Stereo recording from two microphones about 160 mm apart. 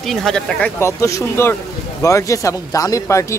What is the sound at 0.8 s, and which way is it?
Speech, 20° left (ahead or behind).